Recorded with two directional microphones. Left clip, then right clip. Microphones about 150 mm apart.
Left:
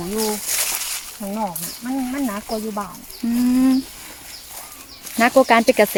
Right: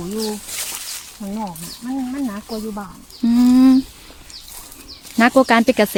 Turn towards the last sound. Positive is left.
turn(degrees=-40)  # may be behind; listen again after turning